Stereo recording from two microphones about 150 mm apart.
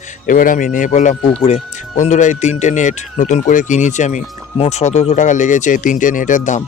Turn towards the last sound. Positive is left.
turn(degrees=55)  # may be behind; listen again after turning